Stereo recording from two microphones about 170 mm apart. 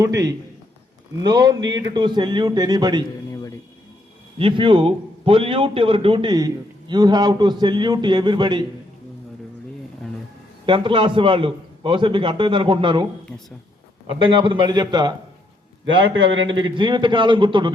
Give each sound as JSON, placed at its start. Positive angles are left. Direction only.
{"t": 0.0, "sound": "a man's voice", "side_deg": -20}
{"t": 4.4, "sound": "a man's voice", "side_deg": -30}
{"t": 10.7, "sound": "a man's voice", "side_deg": -30}
{"t": 14.1, "sound": "a man's voice", "side_deg": -30}